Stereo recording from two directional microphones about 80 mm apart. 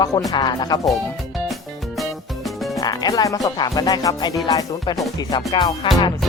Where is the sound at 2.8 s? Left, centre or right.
Left.